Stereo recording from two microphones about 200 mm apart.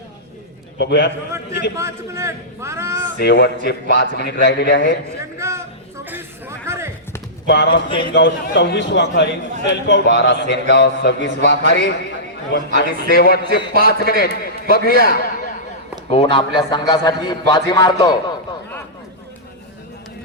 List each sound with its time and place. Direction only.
0.8 s a man's voice: 55° left (ahead or behind)
1.7 s a man's voice: 15° right (ahead or behind)
3.2 s a man's voice: 55° left (ahead or behind)
5.4 s a sound: 15° right (ahead or behind)
6.7 s basketball bounce: 15° right (ahead or behind)
7.4 s a man's voice: 55° left (ahead or behind)
7.7 s a man's voice: 25° left (ahead or behind)
8.0 s a man's voice: 60° left (ahead or behind)
16.0 s a man's voice: 30° left (ahead or behind)